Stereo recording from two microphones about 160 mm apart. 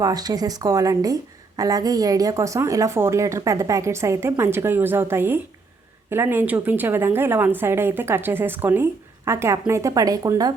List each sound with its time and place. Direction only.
0.0 s a woman's voice: 25° right (ahead or behind)